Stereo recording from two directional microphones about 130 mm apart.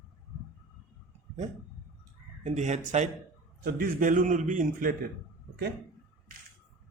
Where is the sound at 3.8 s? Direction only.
90° right.